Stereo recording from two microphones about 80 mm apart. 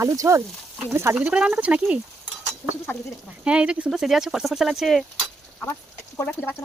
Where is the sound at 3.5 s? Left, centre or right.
Centre.